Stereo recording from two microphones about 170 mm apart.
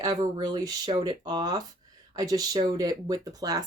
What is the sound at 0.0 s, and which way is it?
Speech, 25° right (ahead or behind).